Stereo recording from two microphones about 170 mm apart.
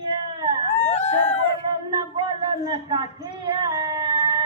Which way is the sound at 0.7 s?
40° left (ahead or behind).